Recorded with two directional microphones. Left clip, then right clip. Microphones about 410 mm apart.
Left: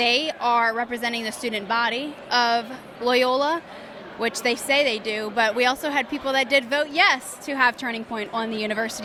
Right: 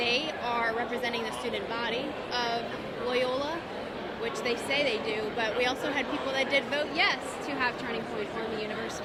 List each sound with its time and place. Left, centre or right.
0.0 s a woman's voice: left